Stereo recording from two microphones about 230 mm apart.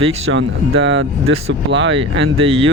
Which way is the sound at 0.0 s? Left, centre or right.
Right.